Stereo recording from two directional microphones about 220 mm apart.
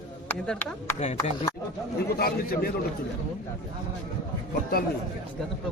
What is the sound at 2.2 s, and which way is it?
Speech, 45° left (ahead or behind).